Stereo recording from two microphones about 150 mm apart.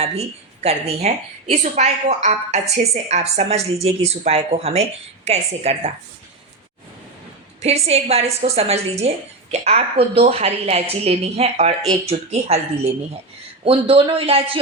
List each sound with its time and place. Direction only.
0.0 s a woman's voice: 45° right (ahead or behind)
7.6 s a woman's voice: 45° right (ahead or behind)